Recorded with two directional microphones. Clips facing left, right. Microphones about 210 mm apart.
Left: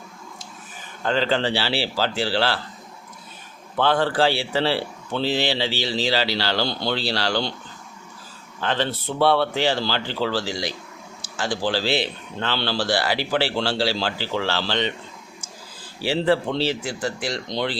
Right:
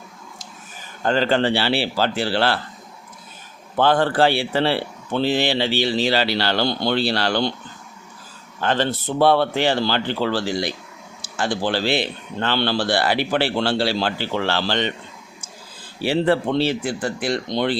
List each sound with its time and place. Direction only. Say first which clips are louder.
1.0 s speech: right 3 dB; 45° right (ahead or behind)
3.8 s speech: right 3 dB; 50° right (ahead or behind)
8.6 s speech: right 3 dB; 50° right (ahead or behind)
16.0 s speech: right 2 dB; 55° right (ahead or behind)